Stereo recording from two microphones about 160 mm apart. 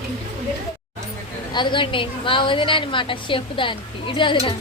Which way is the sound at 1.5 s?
30° left (ahead or behind).